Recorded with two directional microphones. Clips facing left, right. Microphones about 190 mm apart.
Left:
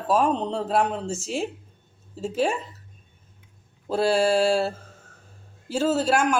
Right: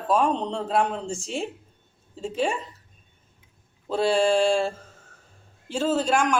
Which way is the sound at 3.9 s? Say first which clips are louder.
Even; 5° left (ahead or behind).